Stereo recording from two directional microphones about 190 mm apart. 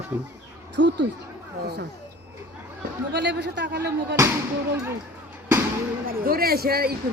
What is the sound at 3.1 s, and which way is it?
Speech, 65° right (ahead or behind).